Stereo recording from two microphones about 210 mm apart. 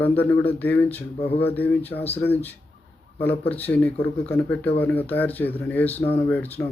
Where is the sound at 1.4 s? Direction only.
10° left (ahead or behind).